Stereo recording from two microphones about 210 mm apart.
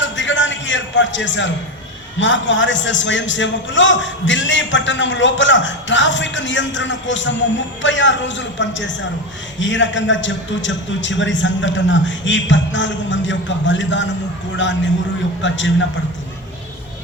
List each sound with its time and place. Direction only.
0.0 s music: 60° left (ahead or behind)
2.1 s a man's voice: 60° left (ahead or behind)